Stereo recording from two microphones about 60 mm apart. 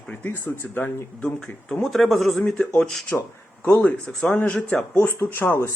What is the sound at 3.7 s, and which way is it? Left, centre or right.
Speech, left.